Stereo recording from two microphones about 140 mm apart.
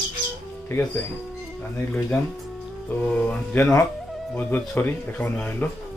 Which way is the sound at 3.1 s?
15° left (ahead or behind).